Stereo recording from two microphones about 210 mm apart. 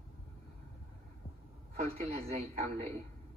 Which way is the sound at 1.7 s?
30° right (ahead or behind).